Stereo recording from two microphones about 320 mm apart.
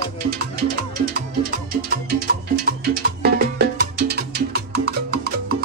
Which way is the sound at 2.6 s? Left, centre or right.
Right.